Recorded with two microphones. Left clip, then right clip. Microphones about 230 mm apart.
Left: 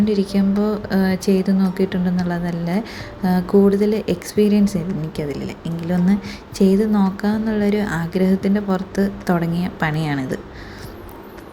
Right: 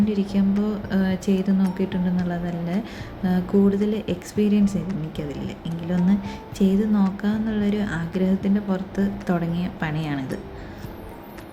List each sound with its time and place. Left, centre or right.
0.0 s speech: centre